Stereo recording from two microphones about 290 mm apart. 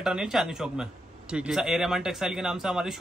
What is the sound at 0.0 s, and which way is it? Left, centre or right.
Speech, centre.